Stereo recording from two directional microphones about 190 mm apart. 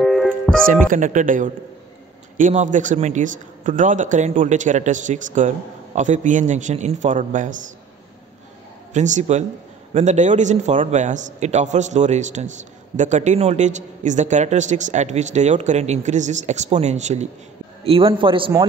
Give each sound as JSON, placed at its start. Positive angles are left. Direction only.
{"t": 0.0, "sound": "music", "side_deg": 0}
{"t": 0.7, "sound": "a man's voice", "side_deg": -45}
{"t": 8.9, "sound": "a man's voice", "side_deg": -40}